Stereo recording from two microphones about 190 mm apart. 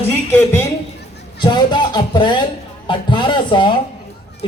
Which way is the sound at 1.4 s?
25° left (ahead or behind).